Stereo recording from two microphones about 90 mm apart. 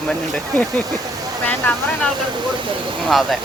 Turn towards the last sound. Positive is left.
turn(degrees=0)  # may be behind; listen again after turning